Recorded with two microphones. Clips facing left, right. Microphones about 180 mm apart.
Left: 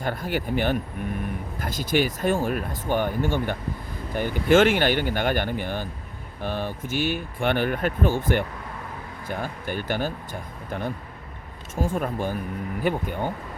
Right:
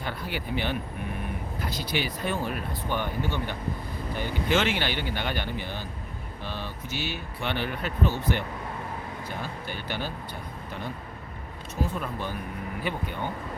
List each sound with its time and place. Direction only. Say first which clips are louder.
0.0 s speech: left 6 dB; 45° left (ahead or behind)
11.7 s speech: left 5 dB; 50° left (ahead or behind)